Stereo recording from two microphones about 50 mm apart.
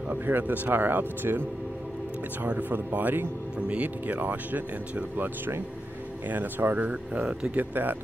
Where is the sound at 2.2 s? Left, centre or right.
Right.